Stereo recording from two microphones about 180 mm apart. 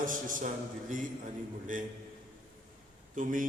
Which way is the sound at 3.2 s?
45° right (ahead or behind).